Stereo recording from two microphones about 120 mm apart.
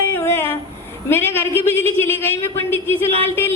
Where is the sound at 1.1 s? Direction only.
20° left (ahead or behind).